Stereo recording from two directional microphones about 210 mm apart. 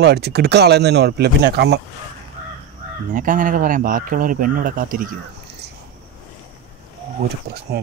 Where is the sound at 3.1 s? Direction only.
40° right (ahead or behind).